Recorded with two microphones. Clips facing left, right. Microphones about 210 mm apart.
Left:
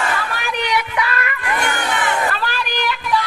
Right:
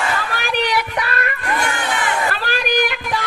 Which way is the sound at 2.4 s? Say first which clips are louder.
Right 4 dB; 45° right (ahead or behind).